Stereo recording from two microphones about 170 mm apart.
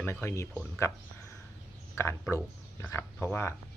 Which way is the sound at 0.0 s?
15° left (ahead or behind).